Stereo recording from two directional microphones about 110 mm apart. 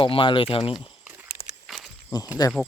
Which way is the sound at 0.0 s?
50° left (ahead or behind).